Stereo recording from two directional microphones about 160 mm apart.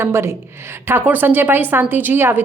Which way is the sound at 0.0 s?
15° right (ahead or behind).